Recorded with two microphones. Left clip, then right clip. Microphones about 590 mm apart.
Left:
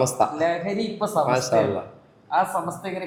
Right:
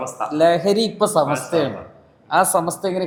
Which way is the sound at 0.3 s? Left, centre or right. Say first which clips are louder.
Right 8 dB; right.